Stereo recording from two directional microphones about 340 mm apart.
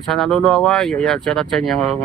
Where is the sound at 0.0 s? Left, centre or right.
Centre.